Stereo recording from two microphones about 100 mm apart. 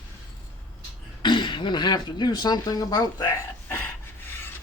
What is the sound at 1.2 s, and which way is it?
Speech, 50° left (ahead or behind).